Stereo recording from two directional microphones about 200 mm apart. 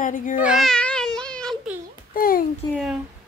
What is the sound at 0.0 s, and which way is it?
Speech, 40° left (ahead or behind).